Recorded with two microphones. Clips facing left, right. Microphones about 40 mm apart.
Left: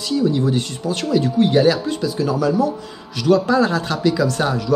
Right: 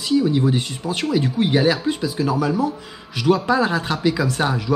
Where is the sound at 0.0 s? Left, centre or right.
Centre.